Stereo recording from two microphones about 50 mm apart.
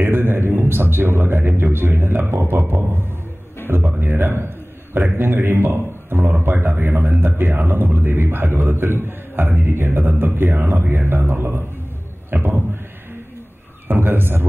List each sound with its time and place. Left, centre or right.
0.0 s a sound: right
0.5 s a man's voice: right
13.8 s a man's voice: right